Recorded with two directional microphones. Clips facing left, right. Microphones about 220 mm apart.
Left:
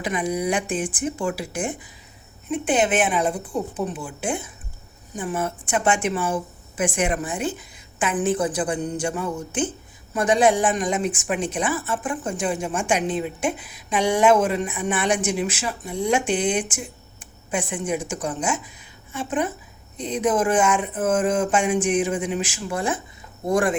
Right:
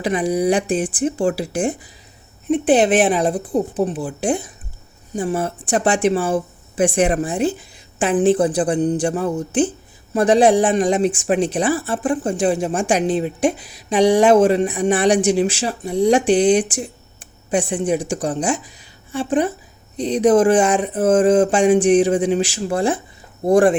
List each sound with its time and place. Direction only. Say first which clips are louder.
0.0 s a woman's voice: right 6 dB; 35° right (ahead or behind)